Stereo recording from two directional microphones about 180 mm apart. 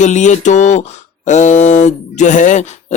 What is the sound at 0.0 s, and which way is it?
Speech, 40° left (ahead or behind).